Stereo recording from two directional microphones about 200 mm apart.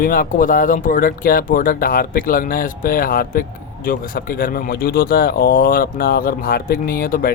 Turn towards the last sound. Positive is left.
turn(degrees=45)  # may be behind; listen again after turning